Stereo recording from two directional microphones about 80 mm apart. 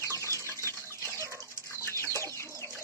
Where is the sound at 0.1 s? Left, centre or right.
Left.